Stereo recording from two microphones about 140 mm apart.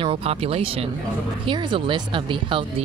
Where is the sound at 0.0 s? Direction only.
40° right (ahead or behind).